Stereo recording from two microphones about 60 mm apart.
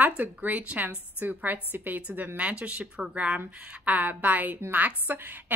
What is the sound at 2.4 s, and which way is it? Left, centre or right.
A woman's voice, right.